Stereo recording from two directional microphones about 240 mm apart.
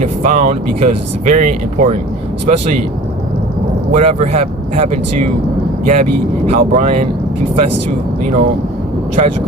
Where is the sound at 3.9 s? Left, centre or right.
Right.